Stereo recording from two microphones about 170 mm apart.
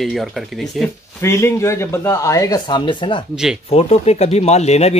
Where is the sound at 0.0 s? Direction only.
Centre (ahead or behind).